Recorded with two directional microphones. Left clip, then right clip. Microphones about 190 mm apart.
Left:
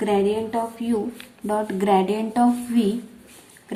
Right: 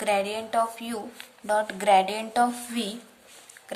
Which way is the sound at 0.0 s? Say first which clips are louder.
Left 4 dB; 35° right (ahead or behind).